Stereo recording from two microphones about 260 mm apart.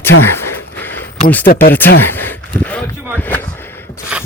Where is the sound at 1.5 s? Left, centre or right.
Left.